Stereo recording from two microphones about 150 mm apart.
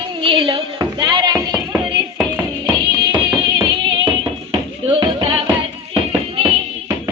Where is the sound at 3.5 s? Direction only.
35° right (ahead or behind).